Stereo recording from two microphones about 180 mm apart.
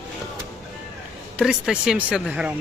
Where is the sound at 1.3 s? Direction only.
5° right (ahead or behind).